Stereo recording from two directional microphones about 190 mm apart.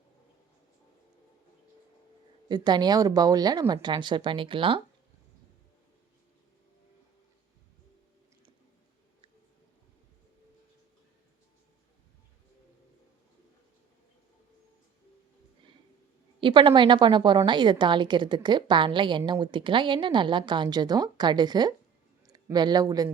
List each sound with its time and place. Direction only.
2.5 s a woman's voice: 20° right (ahead or behind)
16.4 s a woman's voice: 25° right (ahead or behind)